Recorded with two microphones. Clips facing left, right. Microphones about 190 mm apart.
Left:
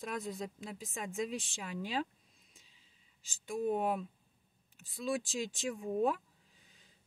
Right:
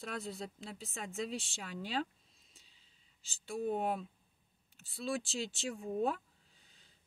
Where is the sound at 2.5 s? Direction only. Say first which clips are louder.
Left 1 dB; 35° right (ahead or behind).